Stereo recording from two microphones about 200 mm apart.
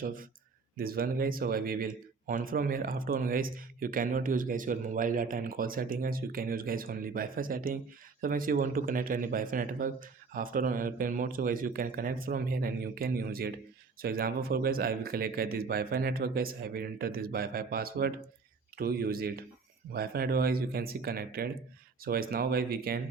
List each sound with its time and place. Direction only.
0.0 s speech: 45° right (ahead or behind)